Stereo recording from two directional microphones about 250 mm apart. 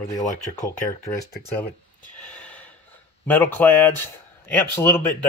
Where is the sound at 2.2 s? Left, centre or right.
Centre.